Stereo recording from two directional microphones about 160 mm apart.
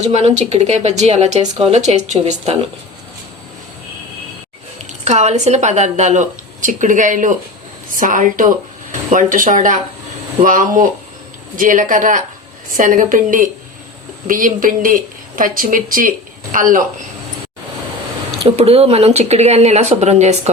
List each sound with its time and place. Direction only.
0.0 s speech: 45° right (ahead or behind)
4.9 s speech: 45° right (ahead or behind)
18.4 s speech: 40° right (ahead or behind)